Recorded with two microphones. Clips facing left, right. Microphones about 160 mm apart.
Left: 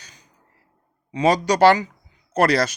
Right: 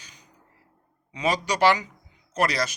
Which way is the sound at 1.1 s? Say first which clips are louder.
Left 7 dB; 35° left (ahead or behind).